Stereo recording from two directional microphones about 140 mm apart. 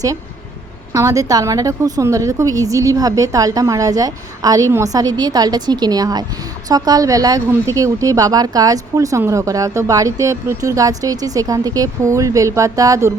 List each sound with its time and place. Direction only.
0.9 s speech: 25° right (ahead or behind)